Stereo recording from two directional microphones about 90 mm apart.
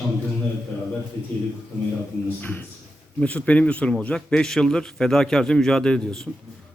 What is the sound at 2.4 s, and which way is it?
A man's voice, 20° left (ahead or behind).